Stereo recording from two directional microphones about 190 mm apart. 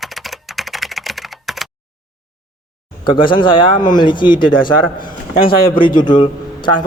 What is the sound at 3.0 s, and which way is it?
Speech, 25° left (ahead or behind).